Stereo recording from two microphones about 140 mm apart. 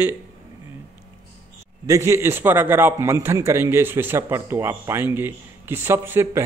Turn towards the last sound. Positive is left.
turn(degrees=-15)  # may be behind; listen again after turning